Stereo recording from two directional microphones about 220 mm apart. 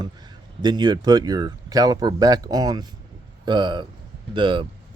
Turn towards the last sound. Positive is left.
turn(degrees=-20)  # may be behind; listen again after turning